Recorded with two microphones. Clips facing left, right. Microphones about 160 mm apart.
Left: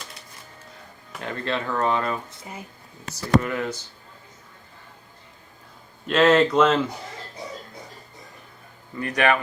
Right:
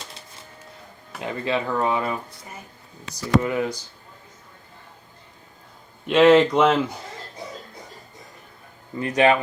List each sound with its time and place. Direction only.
1.2 s speech: 10° right (ahead or behind)
3.1 s speech: 50° left (ahead or behind)
3.4 s speech: 15° right (ahead or behind)
6.1 s speech: 10° right (ahead or behind)
9.0 s speech: 25° right (ahead or behind)